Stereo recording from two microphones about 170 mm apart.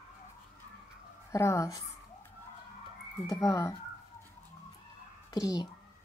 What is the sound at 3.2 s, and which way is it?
Speech, 20° left (ahead or behind).